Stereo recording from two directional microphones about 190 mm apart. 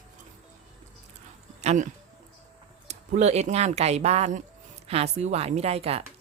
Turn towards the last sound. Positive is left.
turn(degrees=-30)  # may be behind; listen again after turning